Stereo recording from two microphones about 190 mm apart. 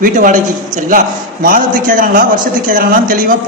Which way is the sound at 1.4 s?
45° right (ahead or behind).